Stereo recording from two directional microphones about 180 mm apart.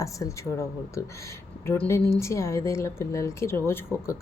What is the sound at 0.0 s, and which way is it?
A woman's voice, 15° left (ahead or behind).